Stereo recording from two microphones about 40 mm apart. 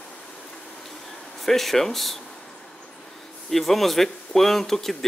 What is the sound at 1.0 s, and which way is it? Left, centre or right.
Speech, centre.